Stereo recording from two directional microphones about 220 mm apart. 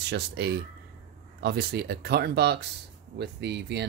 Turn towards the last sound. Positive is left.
turn(degrees=-50)  # may be behind; listen again after turning